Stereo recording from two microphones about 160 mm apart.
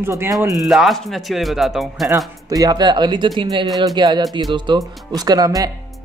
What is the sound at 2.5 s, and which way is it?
Speech, 25° right (ahead or behind).